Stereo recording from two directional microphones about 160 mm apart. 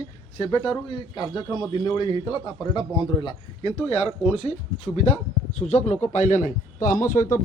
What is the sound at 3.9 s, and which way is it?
Speech, 45° left (ahead or behind).